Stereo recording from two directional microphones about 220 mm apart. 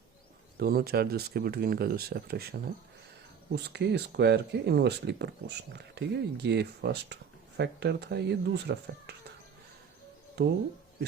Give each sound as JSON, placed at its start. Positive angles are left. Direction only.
{"t": 0.5, "sound": "speech", "side_deg": -45}
{"t": 10.4, "sound": "speech", "side_deg": -50}